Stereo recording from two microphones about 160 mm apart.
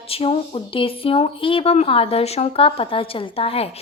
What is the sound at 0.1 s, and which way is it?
A woman's voice, 35° left (ahead or behind).